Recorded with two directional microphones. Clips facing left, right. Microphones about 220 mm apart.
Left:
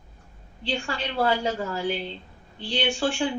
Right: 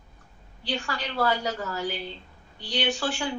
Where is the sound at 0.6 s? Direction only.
25° left (ahead or behind).